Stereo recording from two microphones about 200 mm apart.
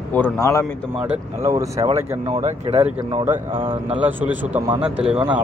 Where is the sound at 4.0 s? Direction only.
10° right (ahead or behind).